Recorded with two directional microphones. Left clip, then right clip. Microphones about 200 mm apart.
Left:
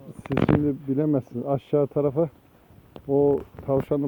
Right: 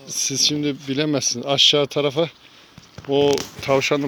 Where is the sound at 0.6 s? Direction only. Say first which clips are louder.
Right 2 dB; 15° right (ahead or behind).